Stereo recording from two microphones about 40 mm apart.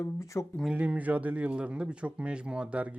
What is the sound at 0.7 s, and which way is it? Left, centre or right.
A man's voice, right.